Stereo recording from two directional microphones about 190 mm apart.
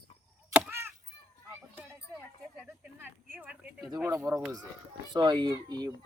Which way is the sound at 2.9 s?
10° right (ahead or behind).